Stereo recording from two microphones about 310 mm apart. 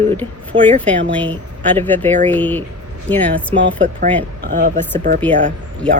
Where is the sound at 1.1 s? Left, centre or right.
Centre.